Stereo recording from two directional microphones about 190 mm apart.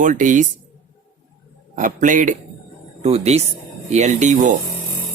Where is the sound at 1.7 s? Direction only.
45° right (ahead or behind).